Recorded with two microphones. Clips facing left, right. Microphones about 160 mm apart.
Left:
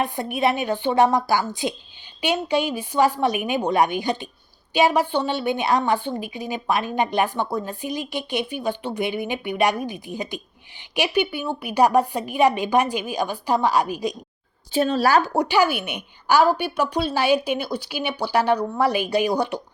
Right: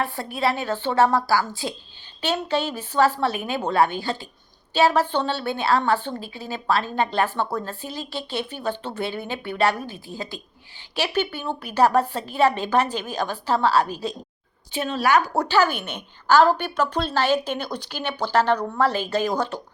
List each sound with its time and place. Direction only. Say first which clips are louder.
0.0 s a woman's voice: left 2 dB; 20° left (ahead or behind)
14.7 s speech: left 3 dB; 35° left (ahead or behind)
15.3 s a woman's voice: left 1 dB; 15° left (ahead or behind)